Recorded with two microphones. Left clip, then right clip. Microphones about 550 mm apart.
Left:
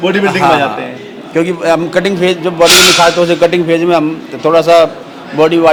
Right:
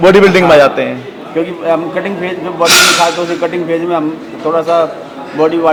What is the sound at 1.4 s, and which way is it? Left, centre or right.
A man's voice, left.